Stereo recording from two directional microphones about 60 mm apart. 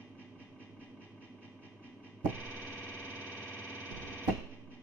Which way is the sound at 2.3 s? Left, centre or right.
Right.